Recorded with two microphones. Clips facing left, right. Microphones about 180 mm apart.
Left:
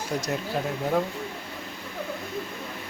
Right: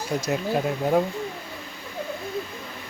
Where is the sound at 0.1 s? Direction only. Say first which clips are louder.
Right 2 dB; centre (ahead or behind).